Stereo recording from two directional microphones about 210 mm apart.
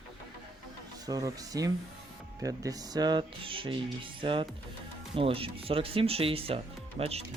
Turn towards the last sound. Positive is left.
turn(degrees=-35)  # may be behind; listen again after turning